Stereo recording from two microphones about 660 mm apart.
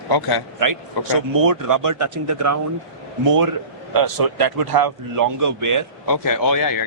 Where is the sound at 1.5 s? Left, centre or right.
Right.